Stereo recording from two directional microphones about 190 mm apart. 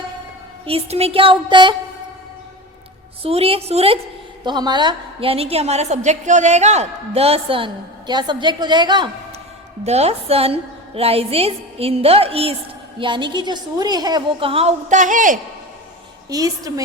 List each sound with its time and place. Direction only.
0.6 s a woman's voice: 30° right (ahead or behind)
3.2 s a woman's voice: 30° right (ahead or behind)
9.8 s a woman's voice: 35° right (ahead or behind)
16.3 s a woman's voice: 20° right (ahead or behind)